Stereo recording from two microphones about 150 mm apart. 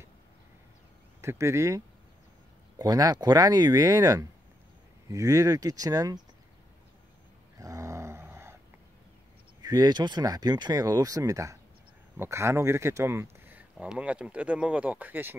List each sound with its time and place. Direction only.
1.2 s speech: 20° right (ahead or behind)
2.8 s speech: 25° right (ahead or behind)
7.5 s a sound: 20° right (ahead or behind)
9.6 s speech: 25° right (ahead or behind)